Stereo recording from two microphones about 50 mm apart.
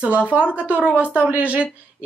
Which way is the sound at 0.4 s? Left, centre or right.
Left.